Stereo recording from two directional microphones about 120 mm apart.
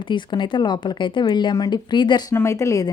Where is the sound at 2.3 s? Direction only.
25° left (ahead or behind).